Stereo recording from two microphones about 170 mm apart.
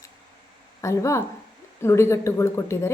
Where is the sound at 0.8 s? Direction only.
15° left (ahead or behind).